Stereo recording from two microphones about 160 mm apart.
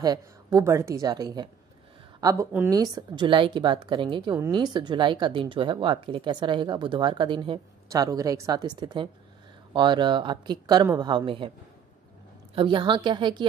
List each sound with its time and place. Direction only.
0.0 s a woman's voice: 25° right (ahead or behind)
2.1 s a sound: 20° right (ahead or behind)
2.7 s a woman's voice: 25° right (ahead or behind)
12.5 s a woman's voice: 30° right (ahead or behind)